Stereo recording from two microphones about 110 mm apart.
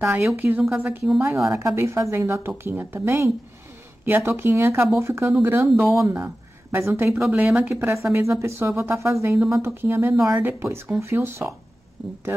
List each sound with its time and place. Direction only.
0.4 s speech: 15° right (ahead or behind)
0.8 s speech: 5° right (ahead or behind)
1.2 s speech: 25° right (ahead or behind)
7.2 s speech: 10° right (ahead or behind)
7.7 s speech: 25° right (ahead or behind)
12.0 s speech: 10° right (ahead or behind)